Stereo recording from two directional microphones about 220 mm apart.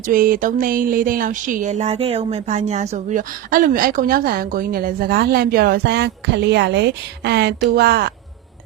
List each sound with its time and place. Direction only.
0.1 s speech: 40° right (ahead or behind)